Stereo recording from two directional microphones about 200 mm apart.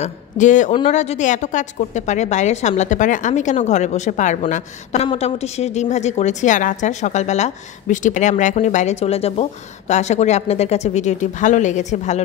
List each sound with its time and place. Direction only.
0.0 s a woman's voice: 40° left (ahead or behind)